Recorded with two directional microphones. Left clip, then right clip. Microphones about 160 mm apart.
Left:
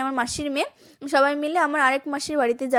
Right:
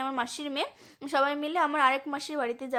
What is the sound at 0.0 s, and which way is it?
A woman's voice, 30° left (ahead or behind).